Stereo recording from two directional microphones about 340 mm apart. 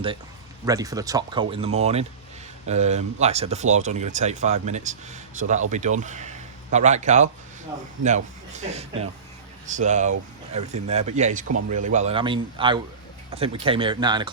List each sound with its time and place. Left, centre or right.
0.6 s speech: centre